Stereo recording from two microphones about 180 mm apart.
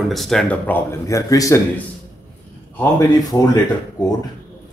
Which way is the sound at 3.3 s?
15° left (ahead or behind).